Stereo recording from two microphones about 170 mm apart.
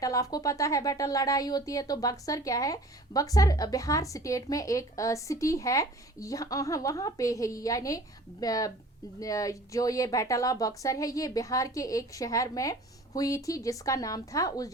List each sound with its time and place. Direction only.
0.0 s speech: 20° left (ahead or behind)